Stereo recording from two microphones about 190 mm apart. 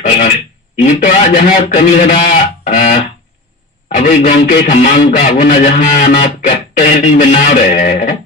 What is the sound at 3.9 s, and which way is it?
Speech, 35° left (ahead or behind).